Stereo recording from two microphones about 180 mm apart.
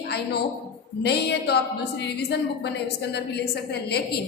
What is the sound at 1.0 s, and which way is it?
A woman's voice, 65° left (ahead or behind).